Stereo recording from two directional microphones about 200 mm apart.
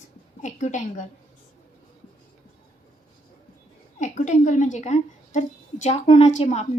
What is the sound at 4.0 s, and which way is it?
A woman's voice, 40° left (ahead or behind).